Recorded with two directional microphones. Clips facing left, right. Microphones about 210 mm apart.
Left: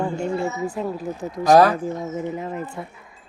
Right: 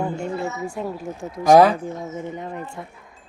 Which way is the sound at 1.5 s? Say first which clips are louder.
Right 1 dB; 15° right (ahead or behind).